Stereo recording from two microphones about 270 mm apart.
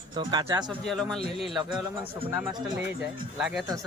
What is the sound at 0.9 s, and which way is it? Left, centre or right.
Speech, centre.